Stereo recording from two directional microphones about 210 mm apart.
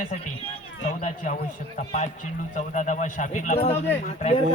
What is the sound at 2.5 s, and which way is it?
Speech, 35° left (ahead or behind).